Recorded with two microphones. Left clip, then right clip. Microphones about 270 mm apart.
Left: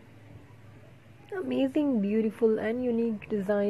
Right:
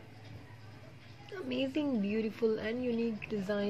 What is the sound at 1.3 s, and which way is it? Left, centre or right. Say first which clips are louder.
Speech: left 7 dB; left.